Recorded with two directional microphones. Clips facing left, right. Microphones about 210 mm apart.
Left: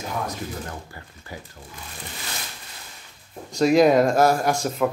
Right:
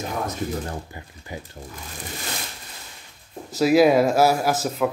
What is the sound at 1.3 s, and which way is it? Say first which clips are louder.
Speech: right 3 dB; 20° right (ahead or behind).